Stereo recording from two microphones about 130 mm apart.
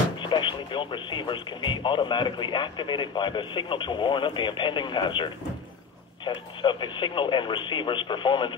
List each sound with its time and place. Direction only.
0.2 s speech: 40° left (ahead or behind)